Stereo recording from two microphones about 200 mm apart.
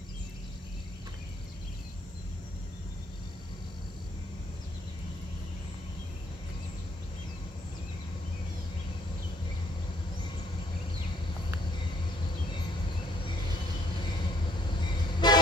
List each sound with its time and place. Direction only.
15.2 s train: 20° left (ahead or behind)